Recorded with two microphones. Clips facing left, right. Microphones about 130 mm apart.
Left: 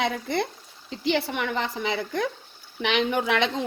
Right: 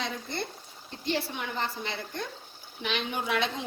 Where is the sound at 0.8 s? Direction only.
90° left.